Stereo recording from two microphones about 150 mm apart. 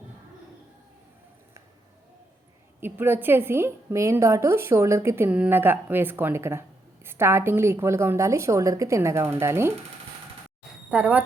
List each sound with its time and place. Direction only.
2.8 s a woman's voice: 15° right (ahead or behind)
10.9 s a woman's voice: 10° right (ahead or behind)